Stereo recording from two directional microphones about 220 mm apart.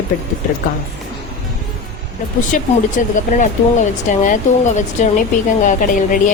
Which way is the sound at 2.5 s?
35° left (ahead or behind).